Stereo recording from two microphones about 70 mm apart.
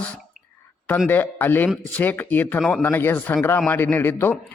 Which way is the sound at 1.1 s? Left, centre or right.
Left.